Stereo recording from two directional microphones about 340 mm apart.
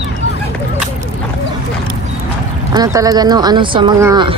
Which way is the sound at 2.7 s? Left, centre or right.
Centre.